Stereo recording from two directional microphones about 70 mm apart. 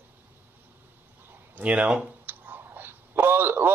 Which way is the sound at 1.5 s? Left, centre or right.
Centre.